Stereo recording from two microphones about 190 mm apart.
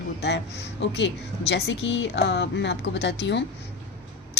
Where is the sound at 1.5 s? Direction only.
65° left (ahead or behind).